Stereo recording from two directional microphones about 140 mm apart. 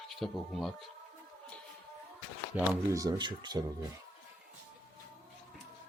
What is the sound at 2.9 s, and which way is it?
Speech, 25° right (ahead or behind).